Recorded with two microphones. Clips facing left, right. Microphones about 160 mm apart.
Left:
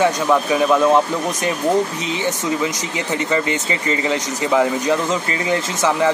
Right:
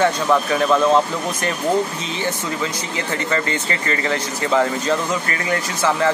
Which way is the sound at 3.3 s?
15° left (ahead or behind).